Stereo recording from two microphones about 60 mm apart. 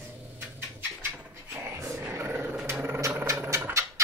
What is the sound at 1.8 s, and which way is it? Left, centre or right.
Dog, right.